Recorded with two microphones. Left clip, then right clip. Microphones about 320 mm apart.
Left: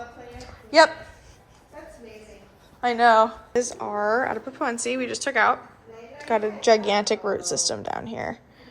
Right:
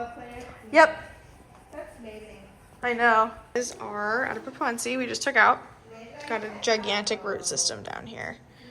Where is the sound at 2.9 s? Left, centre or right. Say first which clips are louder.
Left 4 dB; centre.